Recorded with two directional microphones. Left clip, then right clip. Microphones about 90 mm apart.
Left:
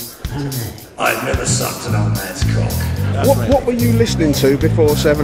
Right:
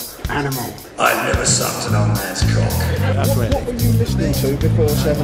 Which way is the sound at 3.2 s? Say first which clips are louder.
Left 10 dB; 40° left (ahead or behind).